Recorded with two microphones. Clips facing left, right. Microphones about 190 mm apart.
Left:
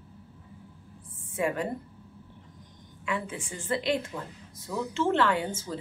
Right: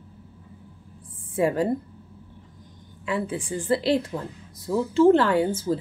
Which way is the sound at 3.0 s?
35° right (ahead or behind).